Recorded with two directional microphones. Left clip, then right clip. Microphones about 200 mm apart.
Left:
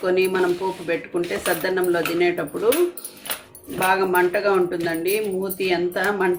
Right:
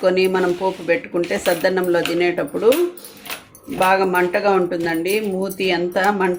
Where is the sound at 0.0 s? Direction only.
35° right (ahead or behind).